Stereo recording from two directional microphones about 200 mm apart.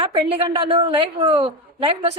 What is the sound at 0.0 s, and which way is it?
A woman's voice, 25° right (ahead or behind).